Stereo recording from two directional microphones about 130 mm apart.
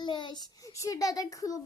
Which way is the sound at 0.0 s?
35° left (ahead or behind).